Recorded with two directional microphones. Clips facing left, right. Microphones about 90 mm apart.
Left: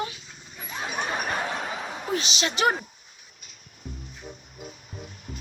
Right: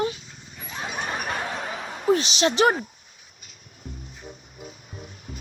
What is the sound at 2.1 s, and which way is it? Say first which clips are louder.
Speech: right 8 dB; 35° right (ahead or behind).